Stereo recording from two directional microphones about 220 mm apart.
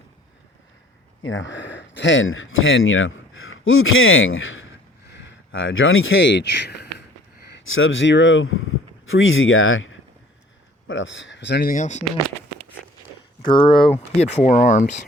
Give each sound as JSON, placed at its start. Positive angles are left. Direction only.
{"t": 1.2, "sound": "speech", "side_deg": 60}
{"t": 7.7, "sound": "speech", "side_deg": 65}
{"t": 11.7, "sound": "speech", "side_deg": 35}
{"t": 13.4, "sound": "speech", "side_deg": 20}